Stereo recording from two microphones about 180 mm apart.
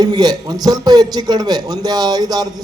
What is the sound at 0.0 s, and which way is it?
A man's voice, 20° right (ahead or behind).